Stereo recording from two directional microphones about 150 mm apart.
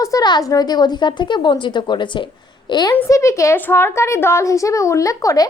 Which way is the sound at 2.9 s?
20° left (ahead or behind).